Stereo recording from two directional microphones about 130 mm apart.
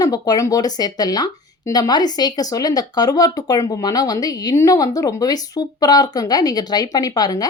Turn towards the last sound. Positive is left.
turn(degrees=30)  # may be behind; listen again after turning